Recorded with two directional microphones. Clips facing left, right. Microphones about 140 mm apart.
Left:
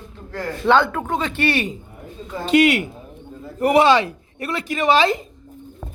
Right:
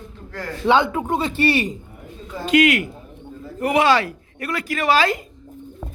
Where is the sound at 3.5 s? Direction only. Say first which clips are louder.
Left 3 dB; 35° left (ahead or behind).